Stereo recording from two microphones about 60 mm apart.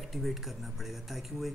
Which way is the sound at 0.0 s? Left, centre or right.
Centre.